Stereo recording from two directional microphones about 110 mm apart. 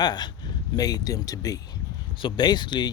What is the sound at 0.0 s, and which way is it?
Speech, 40° left (ahead or behind).